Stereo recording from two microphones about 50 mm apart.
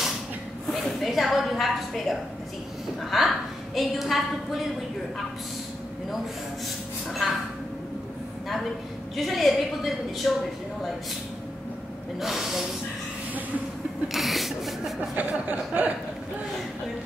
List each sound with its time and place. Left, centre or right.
0.7 s a woman's voice: centre
7.1 s a woman's voice: centre
9.1 s a woman's voice: centre
12.2 s a woman's voice: centre
14.0 s a woman's voice: centre
15.1 s chuckle: right